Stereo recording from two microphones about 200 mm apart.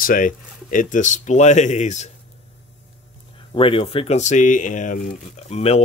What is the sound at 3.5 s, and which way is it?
Speech, 25° left (ahead or behind).